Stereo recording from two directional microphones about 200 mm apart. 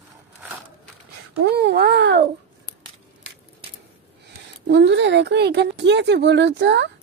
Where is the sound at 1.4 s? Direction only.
55° right (ahead or behind).